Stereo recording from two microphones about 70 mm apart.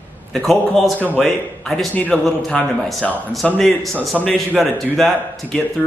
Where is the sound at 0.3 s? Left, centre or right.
Centre.